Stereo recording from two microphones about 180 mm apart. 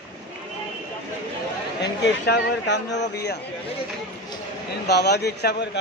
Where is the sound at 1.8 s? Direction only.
70° left (ahead or behind).